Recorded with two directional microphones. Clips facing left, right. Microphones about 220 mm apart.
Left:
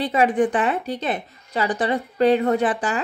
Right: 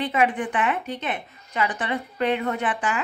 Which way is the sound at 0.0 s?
35° left (ahead or behind).